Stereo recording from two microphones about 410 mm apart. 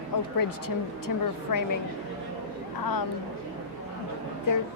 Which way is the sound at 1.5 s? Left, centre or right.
Left.